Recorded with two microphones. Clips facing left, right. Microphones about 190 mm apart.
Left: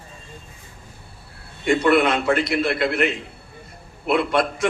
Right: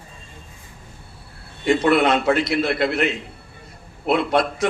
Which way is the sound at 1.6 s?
55° left (ahead or behind).